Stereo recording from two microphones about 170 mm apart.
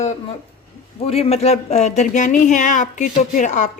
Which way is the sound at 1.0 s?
35° left (ahead or behind).